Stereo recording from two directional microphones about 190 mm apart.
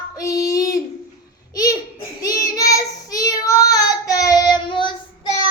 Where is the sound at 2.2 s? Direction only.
20° left (ahead or behind).